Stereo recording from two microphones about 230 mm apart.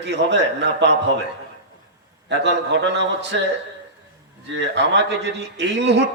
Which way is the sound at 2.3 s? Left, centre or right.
Right.